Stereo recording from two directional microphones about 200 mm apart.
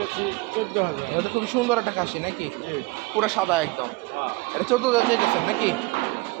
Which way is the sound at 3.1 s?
Centre (ahead or behind).